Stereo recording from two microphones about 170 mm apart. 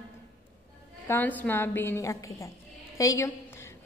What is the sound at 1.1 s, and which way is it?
A woman's voice, 10° left (ahead or behind).